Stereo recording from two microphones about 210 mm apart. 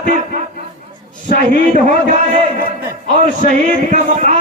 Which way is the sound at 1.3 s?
35° right (ahead or behind).